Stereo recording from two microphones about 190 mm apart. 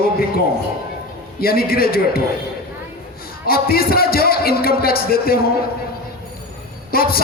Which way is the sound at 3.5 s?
55° left (ahead or behind).